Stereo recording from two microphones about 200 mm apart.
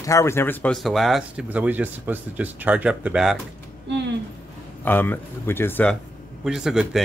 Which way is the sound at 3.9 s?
60° right (ahead or behind).